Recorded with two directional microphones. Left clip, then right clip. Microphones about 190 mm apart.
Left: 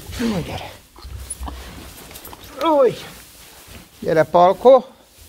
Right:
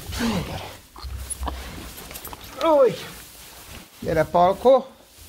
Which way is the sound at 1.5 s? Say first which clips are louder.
Right 3 dB; 60° right (ahead or behind).